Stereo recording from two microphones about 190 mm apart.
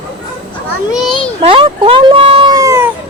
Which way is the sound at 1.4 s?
30° right (ahead or behind).